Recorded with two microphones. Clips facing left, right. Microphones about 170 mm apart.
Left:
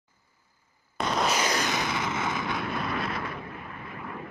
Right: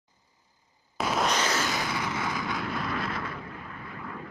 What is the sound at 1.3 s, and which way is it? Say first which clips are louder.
Vehicle: left 1 dB; 15° left (ahead or behind).